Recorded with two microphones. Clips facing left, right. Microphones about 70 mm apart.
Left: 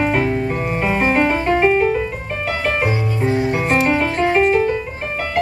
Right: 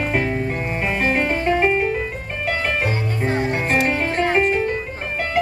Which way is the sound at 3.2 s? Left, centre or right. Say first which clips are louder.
Left 3 dB; right.